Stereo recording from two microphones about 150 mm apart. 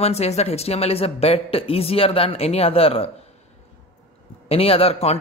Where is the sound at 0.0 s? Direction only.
45° left (ahead or behind).